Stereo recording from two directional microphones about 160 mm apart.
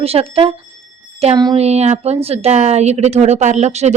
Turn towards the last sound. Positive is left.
turn(degrees=-45)  # may be behind; listen again after turning